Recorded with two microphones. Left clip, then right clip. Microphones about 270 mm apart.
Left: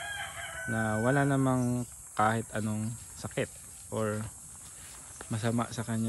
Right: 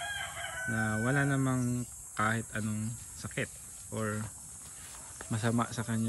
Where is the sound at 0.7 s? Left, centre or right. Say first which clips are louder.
Left 3 dB; centre.